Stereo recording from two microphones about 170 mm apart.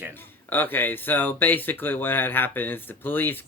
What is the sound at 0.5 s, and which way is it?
Speech, 10° left (ahead or behind).